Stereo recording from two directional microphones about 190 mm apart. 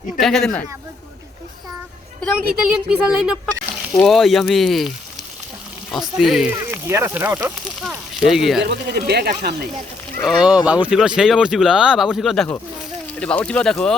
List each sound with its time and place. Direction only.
0.2 s speech: centre (ahead or behind)
2.6 s speech: 5° right (ahead or behind)
5.9 s speech: centre (ahead or behind)
6.7 s speech: 10° right (ahead or behind)
8.6 s speech: 55° right (ahead or behind)
10.2 s speech: centre (ahead or behind)